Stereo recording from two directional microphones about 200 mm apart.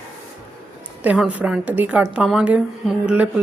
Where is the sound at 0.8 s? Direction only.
5° right (ahead or behind).